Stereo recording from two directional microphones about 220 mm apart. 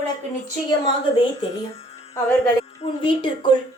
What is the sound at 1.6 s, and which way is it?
A woman's voice, 30° left (ahead or behind).